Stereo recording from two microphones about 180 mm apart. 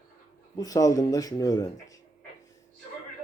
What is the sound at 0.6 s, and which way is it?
Speech, 20° left (ahead or behind).